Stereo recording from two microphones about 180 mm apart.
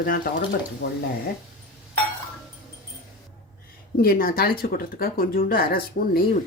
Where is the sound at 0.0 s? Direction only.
55° left (ahead or behind).